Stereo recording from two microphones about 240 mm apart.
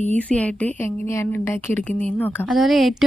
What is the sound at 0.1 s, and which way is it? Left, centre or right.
A woman's voice, centre.